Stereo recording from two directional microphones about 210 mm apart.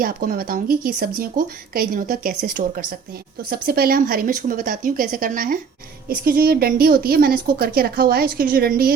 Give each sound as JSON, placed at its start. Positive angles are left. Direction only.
{"t": 0.0, "sound": "a woman's voice", "side_deg": -45}